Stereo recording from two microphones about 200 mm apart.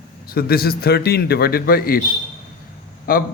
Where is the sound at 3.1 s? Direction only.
45° left (ahead or behind).